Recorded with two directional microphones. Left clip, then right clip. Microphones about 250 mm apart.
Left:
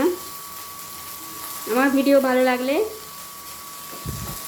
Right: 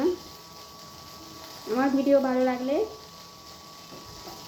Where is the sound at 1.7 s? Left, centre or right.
Left.